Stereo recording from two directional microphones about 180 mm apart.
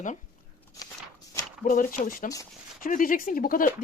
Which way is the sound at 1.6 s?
45° left (ahead or behind).